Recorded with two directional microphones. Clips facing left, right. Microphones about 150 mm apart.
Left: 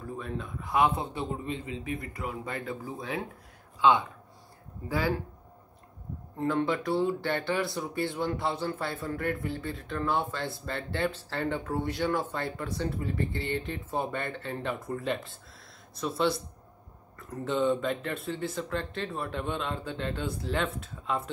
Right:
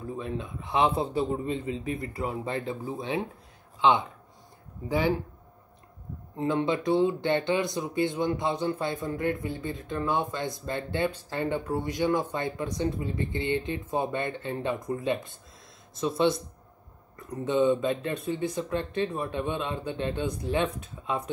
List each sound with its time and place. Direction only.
0.2 s a man's voice: 20° right (ahead or behind)
4.8 s a man's voice: 20° right (ahead or behind)
6.3 s a man's voice: 20° right (ahead or behind)